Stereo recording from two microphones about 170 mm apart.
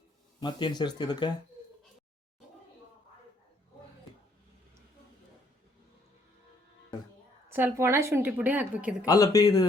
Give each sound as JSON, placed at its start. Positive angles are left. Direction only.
{"t": 0.3, "sound": "speech", "side_deg": 25}
{"t": 7.5, "sound": "a woman's voice", "side_deg": -15}
{"t": 9.0, "sound": "speech", "side_deg": 20}